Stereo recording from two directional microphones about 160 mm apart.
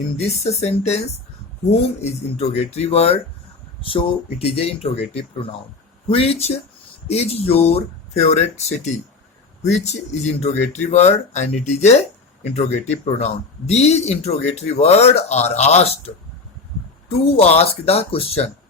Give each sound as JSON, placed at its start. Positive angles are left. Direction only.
{"t": 0.3, "sound": "speech", "side_deg": 40}